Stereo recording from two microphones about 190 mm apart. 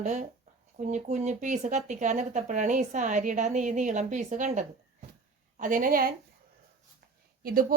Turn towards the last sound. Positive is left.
turn(degrees=-50)  # may be behind; listen again after turning